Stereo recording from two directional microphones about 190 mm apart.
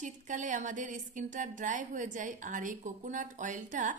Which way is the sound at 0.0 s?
40° right (ahead or behind).